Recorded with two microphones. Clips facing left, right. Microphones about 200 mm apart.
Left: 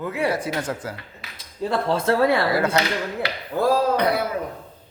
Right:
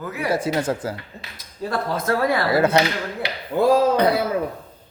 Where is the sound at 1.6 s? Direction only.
30° left (ahead or behind).